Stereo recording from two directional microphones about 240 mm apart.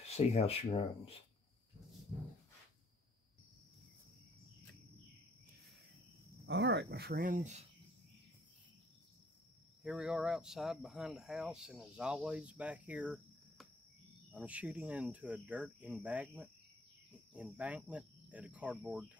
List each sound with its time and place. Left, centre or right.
0.1 s speech: left
6.4 s speech: right
9.8 s speech: centre